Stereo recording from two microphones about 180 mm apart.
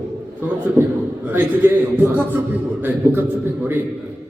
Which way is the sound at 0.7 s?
10° right (ahead or behind).